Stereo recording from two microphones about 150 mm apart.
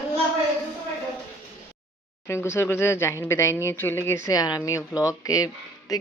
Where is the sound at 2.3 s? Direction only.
15° left (ahead or behind).